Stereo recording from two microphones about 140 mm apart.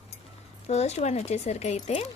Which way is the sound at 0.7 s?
50° left (ahead or behind).